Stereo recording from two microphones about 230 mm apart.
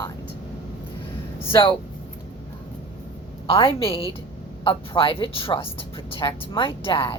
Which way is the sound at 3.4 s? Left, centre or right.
Left.